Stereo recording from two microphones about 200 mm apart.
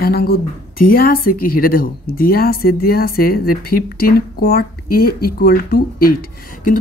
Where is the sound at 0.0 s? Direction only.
50° left (ahead or behind).